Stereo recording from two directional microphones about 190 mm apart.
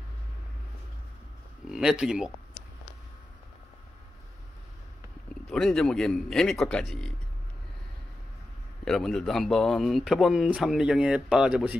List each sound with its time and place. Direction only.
1.7 s speech: 5° right (ahead or behind)
5.5 s speech: 5° left (ahead or behind)
8.8 s speech: centre (ahead or behind)